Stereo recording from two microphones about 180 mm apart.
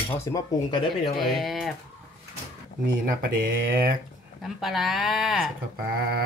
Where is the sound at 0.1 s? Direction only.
15° left (ahead or behind).